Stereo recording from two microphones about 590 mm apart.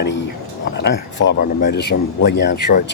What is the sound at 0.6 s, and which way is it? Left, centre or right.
Speech, centre.